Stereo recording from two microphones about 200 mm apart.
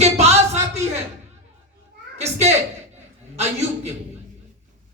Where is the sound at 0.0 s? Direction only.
35° right (ahead or behind).